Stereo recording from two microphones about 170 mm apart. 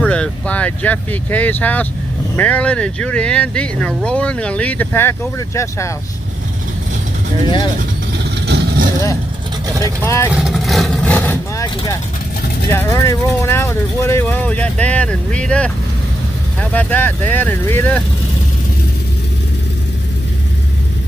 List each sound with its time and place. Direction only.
0.0 s speech: 5° left (ahead or behind)
7.3 s speech: 25° left (ahead or behind)
8.2 s vehicle: 85° right
10.0 s speech: 15° left (ahead or behind)
10.3 s vehicle: centre (ahead or behind); by 12.0 s 20° left (ahead or behind)
12.6 s speech: 15° left (ahead or behind)
16.7 s speech: 10° left (ahead or behind)